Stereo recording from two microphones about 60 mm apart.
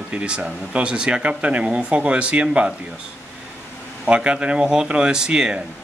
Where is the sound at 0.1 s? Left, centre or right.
Centre.